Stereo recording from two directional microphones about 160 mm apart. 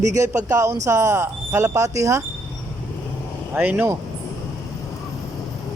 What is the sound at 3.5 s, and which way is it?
Speech, 10° right (ahead or behind).